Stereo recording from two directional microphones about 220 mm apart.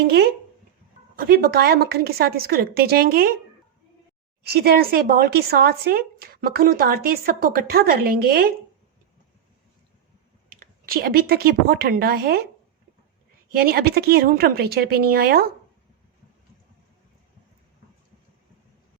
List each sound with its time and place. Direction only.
0.0 s speech: 45° right (ahead or behind)
4.4 s speech: 45° right (ahead or behind)
10.6 s speech: 40° right (ahead or behind)
13.5 s speech: 45° right (ahead or behind)